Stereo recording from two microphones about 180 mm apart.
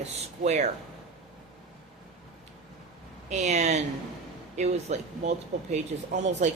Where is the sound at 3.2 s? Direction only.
40° right (ahead or behind).